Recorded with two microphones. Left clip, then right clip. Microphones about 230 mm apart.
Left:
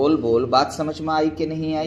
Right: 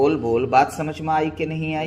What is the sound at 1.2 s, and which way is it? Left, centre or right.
Speech, right.